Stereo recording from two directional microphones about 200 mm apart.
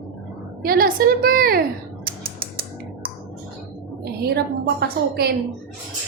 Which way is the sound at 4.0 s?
55° right (ahead or behind).